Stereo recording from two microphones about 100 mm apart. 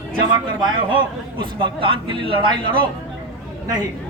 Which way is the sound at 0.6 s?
55° right (ahead or behind).